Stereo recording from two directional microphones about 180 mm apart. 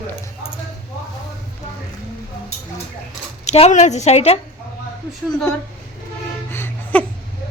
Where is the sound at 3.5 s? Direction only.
40° left (ahead or behind).